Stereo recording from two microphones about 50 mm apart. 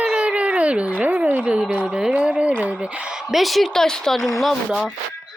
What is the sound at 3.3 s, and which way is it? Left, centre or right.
Speech, centre.